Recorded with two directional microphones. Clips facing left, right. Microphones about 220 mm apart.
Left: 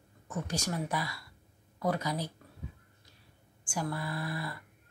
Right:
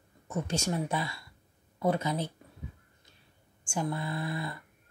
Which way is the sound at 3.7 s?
25° right (ahead or behind).